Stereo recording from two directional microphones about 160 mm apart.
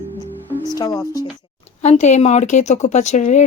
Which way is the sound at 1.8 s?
45° left (ahead or behind).